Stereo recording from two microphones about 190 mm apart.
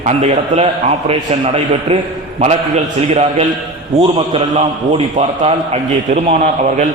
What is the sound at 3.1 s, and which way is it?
A man's voice, 35° right (ahead or behind).